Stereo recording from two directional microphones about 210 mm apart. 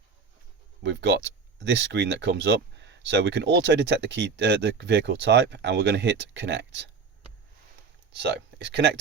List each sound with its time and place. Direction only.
0.8 s speech: 55° right (ahead or behind)
8.1 s speech: 55° right (ahead or behind)